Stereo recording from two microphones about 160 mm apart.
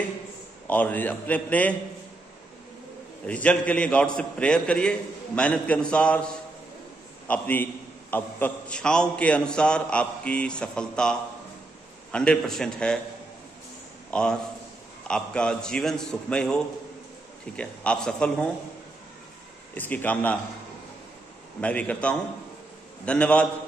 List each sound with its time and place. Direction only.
0.7 s a man's voice: 10° left (ahead or behind)
3.3 s a man's voice: 10° left (ahead or behind)
14.1 s a man's voice: 5° left (ahead or behind)
17.6 s a man's voice: 5° left (ahead or behind)
19.7 s a man's voice: 10° left (ahead or behind)
21.5 s a man's voice: 10° left (ahead or behind)